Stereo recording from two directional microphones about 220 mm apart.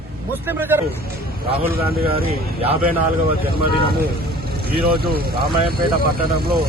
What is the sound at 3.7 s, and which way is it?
Speech, 25° left (ahead or behind).